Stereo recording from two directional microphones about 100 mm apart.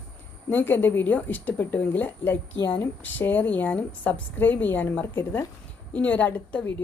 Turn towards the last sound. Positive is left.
turn(degrees=15)  # may be behind; listen again after turning